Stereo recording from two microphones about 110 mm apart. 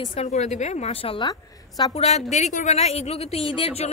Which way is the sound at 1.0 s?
55° left (ahead or behind).